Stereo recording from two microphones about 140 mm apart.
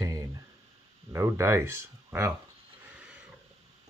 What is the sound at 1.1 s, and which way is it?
Speech, 20° right (ahead or behind).